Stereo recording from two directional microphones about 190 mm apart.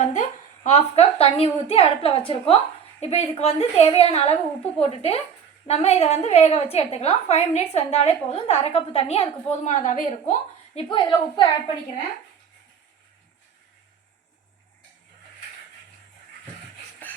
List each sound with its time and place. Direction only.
0.0 s a woman's voice: 40° left (ahead or behind)
10.8 s a woman's voice: 25° left (ahead or behind)